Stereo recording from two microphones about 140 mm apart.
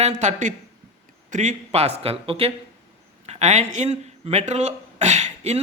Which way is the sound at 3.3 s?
55° right (ahead or behind).